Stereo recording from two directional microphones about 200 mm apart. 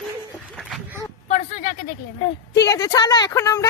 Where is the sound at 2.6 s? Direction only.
15° left (ahead or behind).